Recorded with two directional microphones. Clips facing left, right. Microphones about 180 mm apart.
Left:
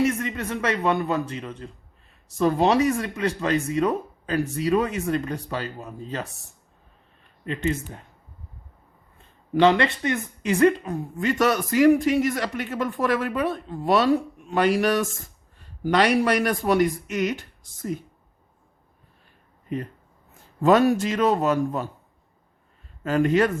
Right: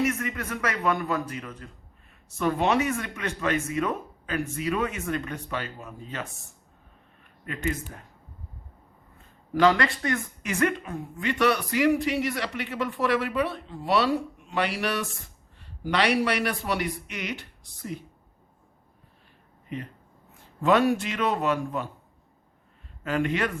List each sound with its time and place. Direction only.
0.0 s speech: 30° left (ahead or behind)
7.4 s speech: 25° left (ahead or behind)
9.5 s speech: 25° left (ahead or behind)
10.5 s speech: 30° left (ahead or behind)
20.6 s speech: 40° left (ahead or behind)
23.0 s speech: 40° left (ahead or behind)